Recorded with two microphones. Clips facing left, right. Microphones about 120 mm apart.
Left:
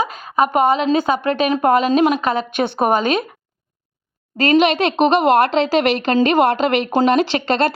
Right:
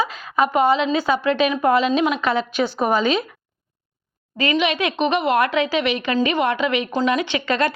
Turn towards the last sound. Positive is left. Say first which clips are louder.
# left 3 dB
turn(degrees=35)  # may be behind; listen again after turning